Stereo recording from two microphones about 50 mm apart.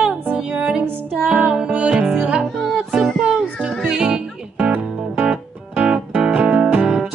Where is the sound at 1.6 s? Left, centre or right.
Right.